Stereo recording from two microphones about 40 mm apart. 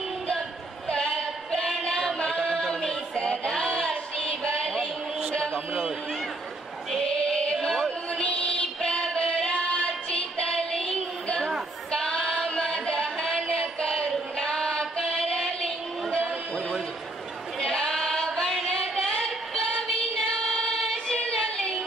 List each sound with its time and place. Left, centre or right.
0.8 s a sound: left
2.1 s chant: left
2.4 s chant: centre
3.2 s a sound: centre
5.7 s run: centre
6.9 s female singing: centre
8.1 s music: left
11.9 s female singing: centre
12.4 s a sound: centre
14.3 s child singing: centre
17.6 s female singing: centre
18.8 s female singing: left
20.2 s singing: left
20.7 s choir: centre